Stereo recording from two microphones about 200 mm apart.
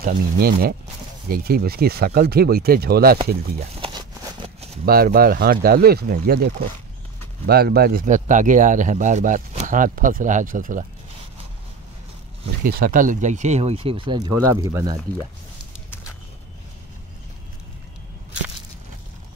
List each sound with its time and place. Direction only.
0.0 s speech: 50° right (ahead or behind)
3.8 s a sound: 25° right (ahead or behind)
4.8 s speech: 50° right (ahead or behind)
12.6 s speech: 45° right (ahead or behind); by 15.0 s 15° right (ahead or behind)